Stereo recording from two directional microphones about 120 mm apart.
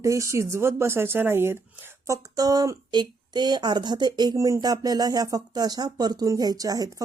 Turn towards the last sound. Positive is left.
turn(degrees=-30)  # may be behind; listen again after turning